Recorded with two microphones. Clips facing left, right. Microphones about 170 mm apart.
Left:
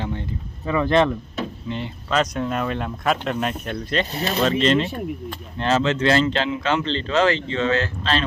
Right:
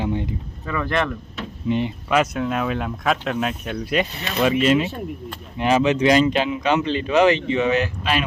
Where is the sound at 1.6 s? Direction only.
15° right (ahead or behind).